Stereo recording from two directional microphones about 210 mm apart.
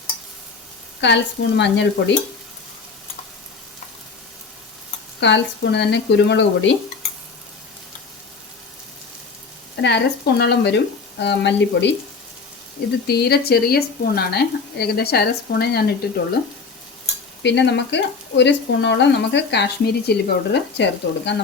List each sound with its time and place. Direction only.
1.0 s speech: 55° left (ahead or behind)
5.2 s speech: 55° left (ahead or behind)
9.8 s speech: 55° left (ahead or behind)
13.1 s speech: 50° left (ahead or behind)
17.4 s speech: 55° left (ahead or behind)